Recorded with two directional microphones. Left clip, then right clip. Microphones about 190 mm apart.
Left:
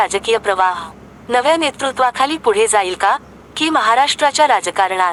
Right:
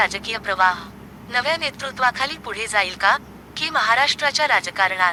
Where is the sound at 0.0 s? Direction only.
10° right (ahead or behind).